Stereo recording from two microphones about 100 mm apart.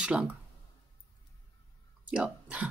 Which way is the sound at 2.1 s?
10° right (ahead or behind).